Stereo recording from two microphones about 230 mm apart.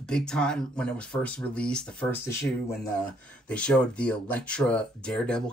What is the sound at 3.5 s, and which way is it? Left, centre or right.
Speech, centre.